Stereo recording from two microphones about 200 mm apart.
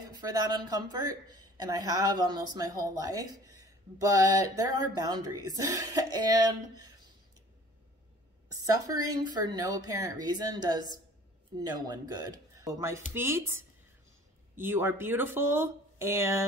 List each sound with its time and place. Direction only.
0.3 s a woman's voice: 20° right (ahead or behind)
8.5 s a woman's voice: 20° right (ahead or behind)